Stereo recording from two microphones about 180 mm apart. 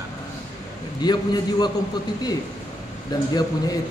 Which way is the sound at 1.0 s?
20° left (ahead or behind).